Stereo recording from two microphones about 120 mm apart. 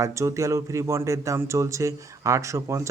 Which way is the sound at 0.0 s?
25° right (ahead or behind).